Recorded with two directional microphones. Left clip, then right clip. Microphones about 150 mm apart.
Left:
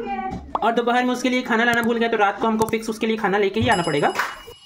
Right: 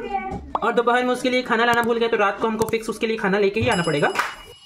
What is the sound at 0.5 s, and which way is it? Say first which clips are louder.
Speech: even; 10° left (ahead or behind).